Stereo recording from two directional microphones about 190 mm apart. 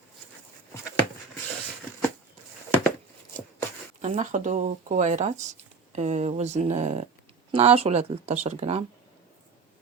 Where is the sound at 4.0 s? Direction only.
40° right (ahead or behind).